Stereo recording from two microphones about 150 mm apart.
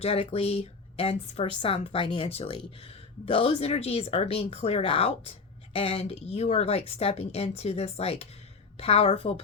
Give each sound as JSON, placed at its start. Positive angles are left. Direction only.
{"t": 0.0, "sound": "a woman's voice", "side_deg": 40}